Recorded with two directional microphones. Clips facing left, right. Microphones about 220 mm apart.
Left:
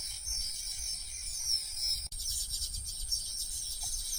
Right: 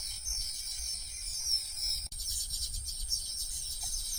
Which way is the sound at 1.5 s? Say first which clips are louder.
Even; centre (ahead or behind).